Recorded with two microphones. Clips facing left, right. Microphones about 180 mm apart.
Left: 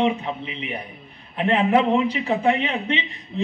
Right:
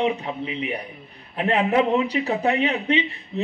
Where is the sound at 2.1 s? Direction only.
40° right (ahead or behind).